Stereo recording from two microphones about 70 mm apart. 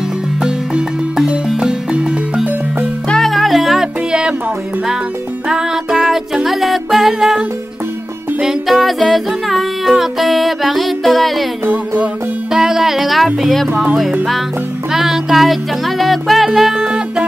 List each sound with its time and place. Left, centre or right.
0.4 s music: centre
3.1 s music: centre
5.5 s music: centre
12.5 s speech: centre
13.4 s music: centre
14.9 s music: centre